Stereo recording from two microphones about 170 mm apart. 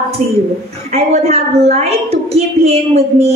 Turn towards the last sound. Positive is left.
turn(degrees=-35)  # may be behind; listen again after turning